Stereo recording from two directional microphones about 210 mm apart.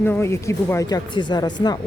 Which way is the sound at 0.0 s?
10° left (ahead or behind).